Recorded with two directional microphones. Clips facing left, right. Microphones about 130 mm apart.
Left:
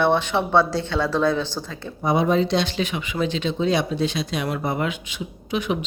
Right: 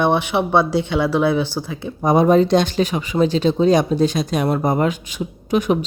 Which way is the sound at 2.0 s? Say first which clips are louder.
Right 6 dB; 45° right (ahead or behind).